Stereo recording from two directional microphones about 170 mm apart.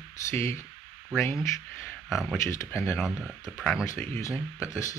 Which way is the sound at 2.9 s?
Centre (ahead or behind).